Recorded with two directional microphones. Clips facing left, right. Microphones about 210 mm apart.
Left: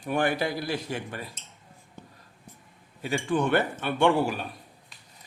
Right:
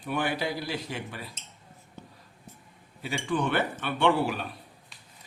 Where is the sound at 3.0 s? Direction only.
45° left (ahead or behind).